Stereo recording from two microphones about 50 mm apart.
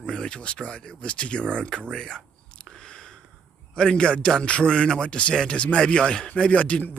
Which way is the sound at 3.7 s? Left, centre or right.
Centre.